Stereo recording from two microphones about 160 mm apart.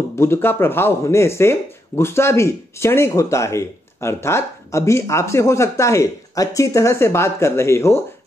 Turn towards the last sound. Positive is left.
turn(degrees=15)  # may be behind; listen again after turning